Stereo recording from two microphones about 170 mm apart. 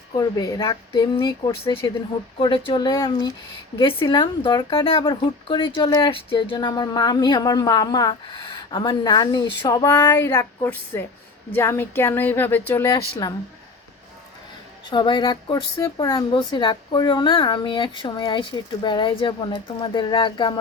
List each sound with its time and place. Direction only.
0.1 s a woman's voice: 20° left (ahead or behind)
14.8 s speech: 25° left (ahead or behind)